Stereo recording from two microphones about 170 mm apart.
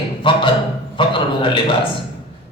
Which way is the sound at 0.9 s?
30° left (ahead or behind).